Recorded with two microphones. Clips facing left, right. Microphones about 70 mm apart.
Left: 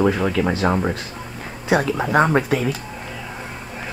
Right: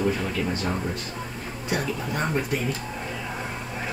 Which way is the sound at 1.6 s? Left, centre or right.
Left.